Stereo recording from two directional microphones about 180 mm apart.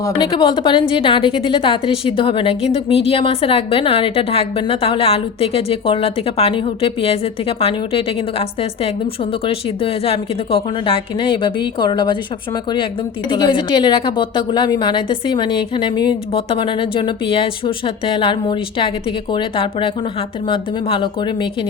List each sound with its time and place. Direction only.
0.0 s a woman's voice: 25° left (ahead or behind)
13.3 s a woman's voice: 25° left (ahead or behind)